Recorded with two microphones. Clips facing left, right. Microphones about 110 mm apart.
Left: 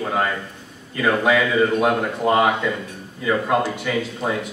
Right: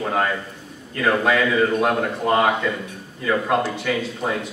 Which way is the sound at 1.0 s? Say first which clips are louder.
Left 1 dB; 5° left (ahead or behind).